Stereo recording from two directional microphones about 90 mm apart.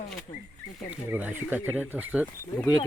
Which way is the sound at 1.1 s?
20° right (ahead or behind).